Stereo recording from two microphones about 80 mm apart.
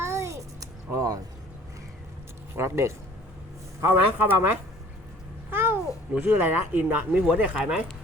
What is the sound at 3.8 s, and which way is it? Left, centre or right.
Speech, right.